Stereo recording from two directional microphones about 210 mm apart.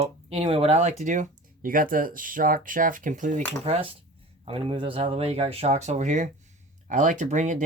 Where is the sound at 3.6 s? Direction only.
25° right (ahead or behind).